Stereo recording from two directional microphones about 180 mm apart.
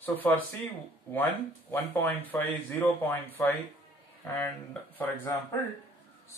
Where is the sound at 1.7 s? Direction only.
10° left (ahead or behind).